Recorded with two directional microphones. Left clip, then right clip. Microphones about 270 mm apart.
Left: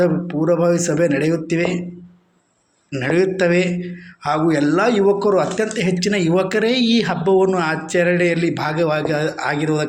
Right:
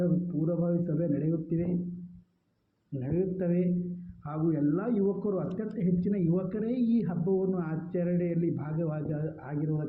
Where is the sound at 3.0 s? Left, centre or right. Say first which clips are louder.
Left 15 dB; centre.